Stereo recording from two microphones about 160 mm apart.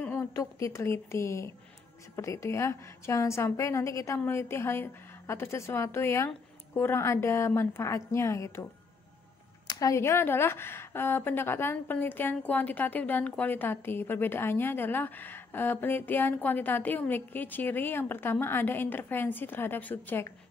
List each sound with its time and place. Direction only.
0.2 s speech: 20° left (ahead or behind)
9.7 s speech: 20° left (ahead or behind)